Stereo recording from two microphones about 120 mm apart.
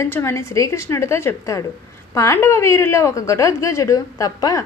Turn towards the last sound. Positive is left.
turn(degrees=30)  # may be behind; listen again after turning